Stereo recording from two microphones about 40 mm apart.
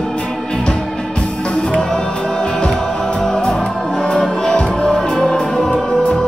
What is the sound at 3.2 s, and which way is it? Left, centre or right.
Music, centre.